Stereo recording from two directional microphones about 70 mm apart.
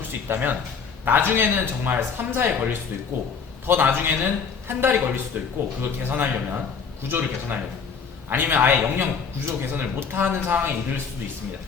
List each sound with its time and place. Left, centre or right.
0.3 s a man's voice: right